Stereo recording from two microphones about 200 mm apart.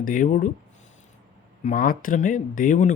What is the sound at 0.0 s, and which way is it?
Speech, 45° left (ahead or behind).